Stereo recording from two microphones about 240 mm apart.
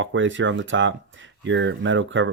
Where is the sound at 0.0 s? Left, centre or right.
Right.